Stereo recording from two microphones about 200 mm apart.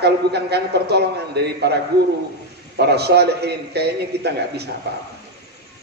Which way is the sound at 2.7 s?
55° right (ahead or behind).